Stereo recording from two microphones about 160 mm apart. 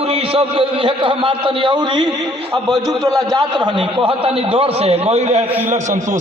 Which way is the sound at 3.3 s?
30° right (ahead or behind).